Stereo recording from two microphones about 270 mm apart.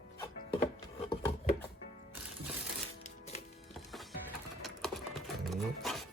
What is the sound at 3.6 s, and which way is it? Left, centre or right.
Music, centre.